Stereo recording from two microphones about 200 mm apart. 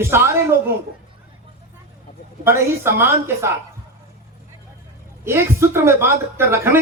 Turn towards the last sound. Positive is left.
turn(degrees=-10)  # may be behind; listen again after turning